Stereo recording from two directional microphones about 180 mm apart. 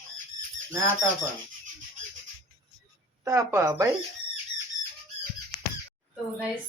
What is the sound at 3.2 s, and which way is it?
Speech, 20° right (ahead or behind).